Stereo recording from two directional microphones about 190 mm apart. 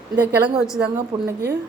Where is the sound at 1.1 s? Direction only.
25° right (ahead or behind).